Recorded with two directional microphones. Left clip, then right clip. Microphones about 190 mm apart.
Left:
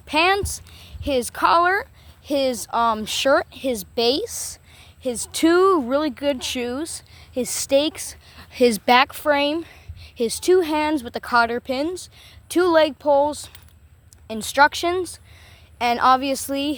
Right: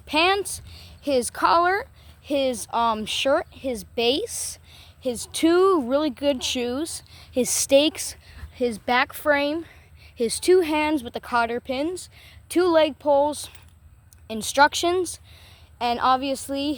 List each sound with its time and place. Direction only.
0.1 s a woman's voice: centre (ahead or behind); by 3.5 s 20° left (ahead or behind)
3.5 s a woman's voice: 30° left (ahead or behind)
3.9 s a woman's voice: 10° left (ahead or behind); by 8.2 s 10° right (ahead or behind)
8.5 s a woman's voice: 30° left (ahead or behind)
8.8 s a woman's voice: 20° left (ahead or behind)
9.0 s speech: 5° left (ahead or behind)
10.2 s speech: centre (ahead or behind)
15.8 s a woman's voice: 20° left (ahead or behind)